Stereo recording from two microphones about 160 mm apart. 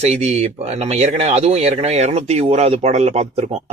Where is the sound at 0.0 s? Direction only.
45° right (ahead or behind).